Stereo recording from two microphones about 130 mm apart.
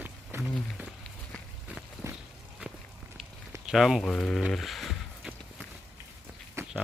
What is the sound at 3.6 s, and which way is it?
Speech, centre (ahead or behind).